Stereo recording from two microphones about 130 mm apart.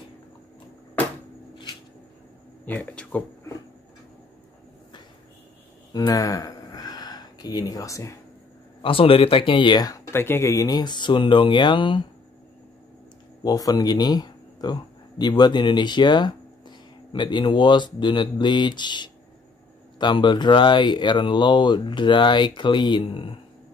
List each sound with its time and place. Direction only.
2.6 s speech: 10° left (ahead or behind)
5.9 s a sound: 30° left (ahead or behind)
8.8 s speech: 45° left (ahead or behind)
13.4 s speech: 30° left (ahead or behind)